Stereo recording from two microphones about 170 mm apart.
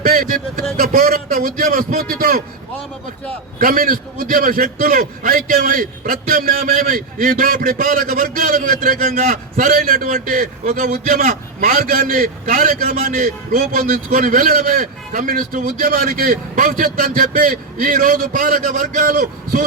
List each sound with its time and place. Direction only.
0.0 s a man's voice: 55° right (ahead or behind)
3.6 s a man's voice: 55° right (ahead or behind)